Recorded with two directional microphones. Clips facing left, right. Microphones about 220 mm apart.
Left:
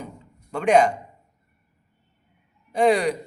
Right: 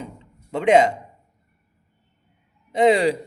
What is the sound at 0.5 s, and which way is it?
Speech, 25° right (ahead or behind).